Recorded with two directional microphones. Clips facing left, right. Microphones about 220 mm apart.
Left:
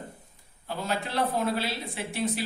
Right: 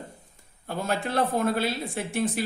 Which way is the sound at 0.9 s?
50° right (ahead or behind).